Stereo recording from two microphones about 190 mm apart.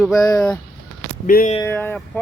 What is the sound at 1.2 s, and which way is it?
Speech, 45° left (ahead or behind).